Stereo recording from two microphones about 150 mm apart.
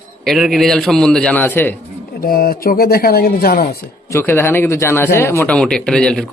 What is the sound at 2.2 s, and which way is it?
Speech, 80° left.